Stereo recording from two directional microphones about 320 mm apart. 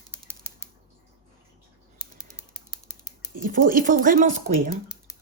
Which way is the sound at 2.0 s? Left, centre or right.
Centre.